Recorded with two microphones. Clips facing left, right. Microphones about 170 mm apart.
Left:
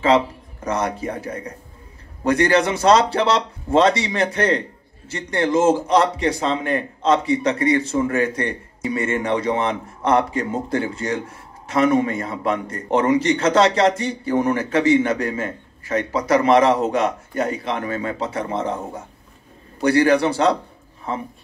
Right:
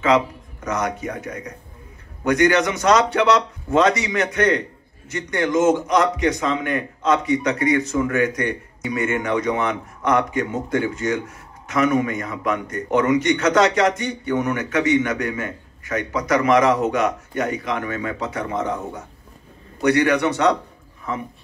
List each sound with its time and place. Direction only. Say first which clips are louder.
0.0 s a man's voice: left 1 dB; 30° left (ahead or behind)